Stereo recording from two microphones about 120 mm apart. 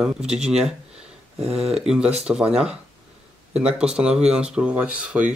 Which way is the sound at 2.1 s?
5° right (ahead or behind).